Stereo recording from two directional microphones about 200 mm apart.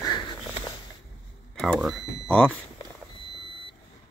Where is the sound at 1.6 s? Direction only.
Centre (ahead or behind).